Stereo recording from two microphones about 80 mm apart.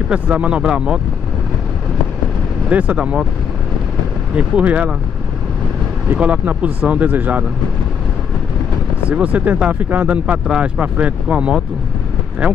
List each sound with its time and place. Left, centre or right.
0.1 s speech: centre
2.7 s speech: centre
4.4 s speech: centre
6.1 s speech: centre
9.1 s speech: centre